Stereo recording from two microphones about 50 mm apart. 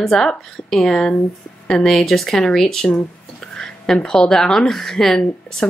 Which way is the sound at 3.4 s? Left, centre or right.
Centre.